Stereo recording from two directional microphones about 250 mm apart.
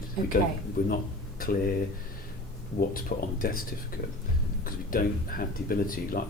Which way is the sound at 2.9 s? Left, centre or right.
Left.